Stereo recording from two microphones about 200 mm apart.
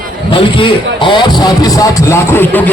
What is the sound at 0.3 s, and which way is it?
Speech, 25° left (ahead or behind).